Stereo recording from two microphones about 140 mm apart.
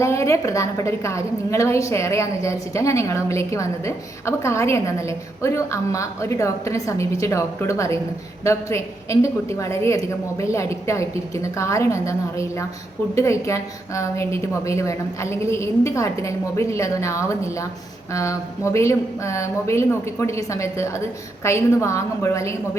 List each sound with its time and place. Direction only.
0.0 s a woman's voice: 20° left (ahead or behind)